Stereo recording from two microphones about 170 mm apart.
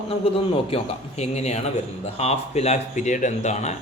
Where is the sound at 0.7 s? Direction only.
40° left (ahead or behind).